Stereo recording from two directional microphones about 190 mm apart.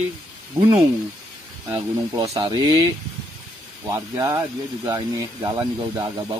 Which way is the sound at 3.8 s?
15° right (ahead or behind).